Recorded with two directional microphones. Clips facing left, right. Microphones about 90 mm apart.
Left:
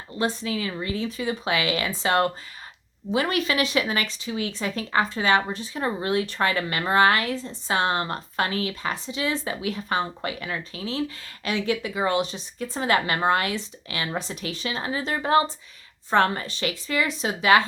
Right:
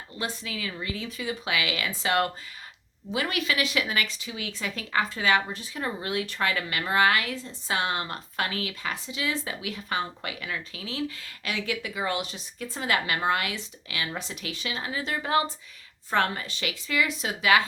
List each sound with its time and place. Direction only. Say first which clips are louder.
0.2 s speech: left 7 dB; 35° left (ahead or behind)